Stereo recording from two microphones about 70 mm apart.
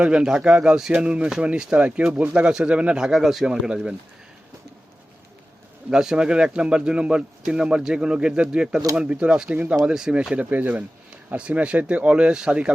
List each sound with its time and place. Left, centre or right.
0.0 s speech: centre
3.1 s speech: centre
5.9 s speech: centre